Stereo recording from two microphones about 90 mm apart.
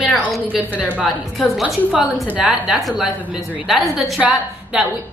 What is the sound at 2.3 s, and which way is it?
A woman's voice, 10° right (ahead or behind).